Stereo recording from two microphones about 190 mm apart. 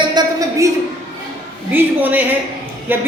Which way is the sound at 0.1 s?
20° right (ahead or behind).